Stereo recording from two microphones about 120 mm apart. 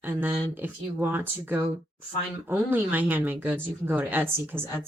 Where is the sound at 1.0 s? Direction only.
15° right (ahead or behind).